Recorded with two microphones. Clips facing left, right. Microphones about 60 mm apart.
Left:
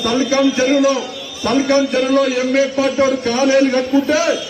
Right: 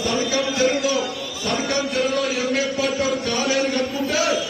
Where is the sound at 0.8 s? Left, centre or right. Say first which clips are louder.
Left 7 dB; left.